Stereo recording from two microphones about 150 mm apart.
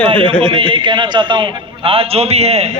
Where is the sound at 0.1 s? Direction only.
35° right (ahead or behind).